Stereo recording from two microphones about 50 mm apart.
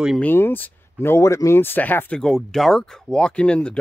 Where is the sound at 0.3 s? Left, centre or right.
Left.